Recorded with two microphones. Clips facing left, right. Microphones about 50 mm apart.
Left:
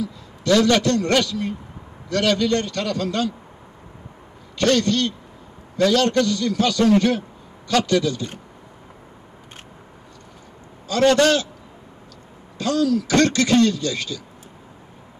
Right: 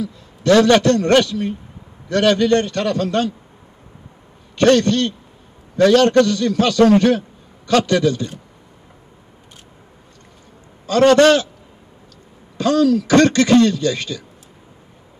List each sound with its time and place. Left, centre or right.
0.0 s a man's voice: right
4.6 s a man's voice: right
10.9 s a man's voice: right
12.5 s a man's voice: right